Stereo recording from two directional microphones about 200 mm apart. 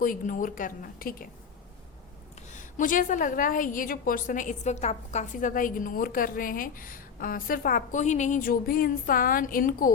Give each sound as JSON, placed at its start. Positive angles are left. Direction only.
{"t": 0.0, "sound": "a woman's voice", "side_deg": 45}
{"t": 2.5, "sound": "a woman's voice", "side_deg": 40}